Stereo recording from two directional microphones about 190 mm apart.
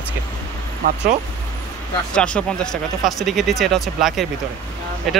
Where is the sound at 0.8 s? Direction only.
45° right (ahead or behind).